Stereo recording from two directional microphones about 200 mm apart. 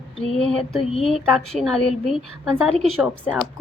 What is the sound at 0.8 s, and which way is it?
Speech, 30° left (ahead or behind).